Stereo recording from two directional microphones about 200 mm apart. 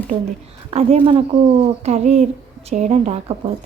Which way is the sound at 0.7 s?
30° right (ahead or behind).